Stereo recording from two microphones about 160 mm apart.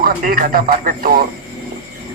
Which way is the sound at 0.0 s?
60° right (ahead or behind).